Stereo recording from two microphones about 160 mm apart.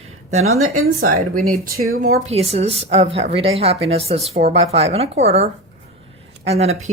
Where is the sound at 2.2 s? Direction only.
40° right (ahead or behind).